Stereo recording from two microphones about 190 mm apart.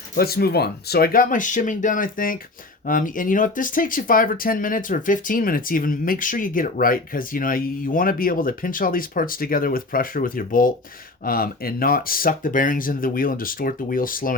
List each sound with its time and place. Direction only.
0.2 s speech: 55° left (ahead or behind)